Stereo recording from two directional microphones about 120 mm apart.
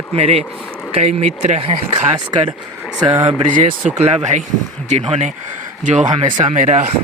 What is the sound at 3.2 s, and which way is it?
Speech, 90° right.